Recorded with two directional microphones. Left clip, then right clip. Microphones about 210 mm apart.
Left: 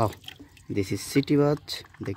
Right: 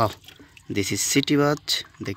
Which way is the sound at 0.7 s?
Centre (ahead or behind).